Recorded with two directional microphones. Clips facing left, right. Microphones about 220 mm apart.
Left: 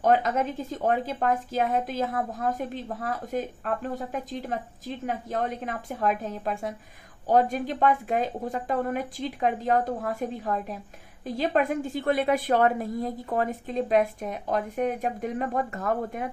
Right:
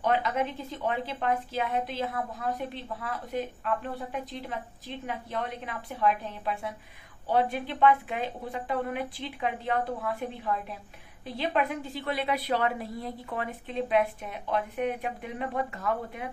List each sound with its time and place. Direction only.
0.0 s speech: 45° left (ahead or behind)